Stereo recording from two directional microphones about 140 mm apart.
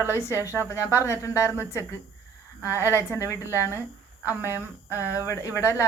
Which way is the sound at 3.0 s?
20° left (ahead or behind).